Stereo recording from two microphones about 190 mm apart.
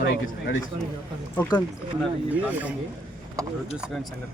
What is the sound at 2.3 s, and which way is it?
Speech, 10° right (ahead or behind).